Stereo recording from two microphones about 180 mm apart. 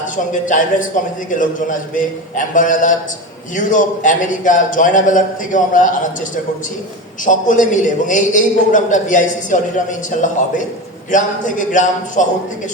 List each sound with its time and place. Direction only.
0.4 s a man's voice: 45° left (ahead or behind)
7.3 s a man's voice: 45° left (ahead or behind)